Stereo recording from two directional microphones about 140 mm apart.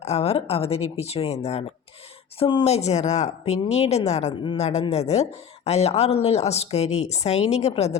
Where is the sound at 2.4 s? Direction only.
35° left (ahead or behind).